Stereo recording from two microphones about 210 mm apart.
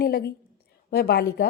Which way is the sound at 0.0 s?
45° left (ahead or behind).